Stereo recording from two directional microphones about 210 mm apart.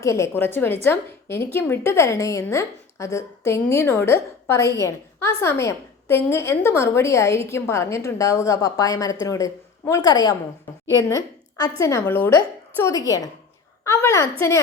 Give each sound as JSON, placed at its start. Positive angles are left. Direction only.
{"t": 0.0, "sound": "a woman's voice", "side_deg": 15}
{"t": 10.7, "sound": "a sound", "side_deg": 10}
{"t": 11.8, "sound": "a woman's voice", "side_deg": 15}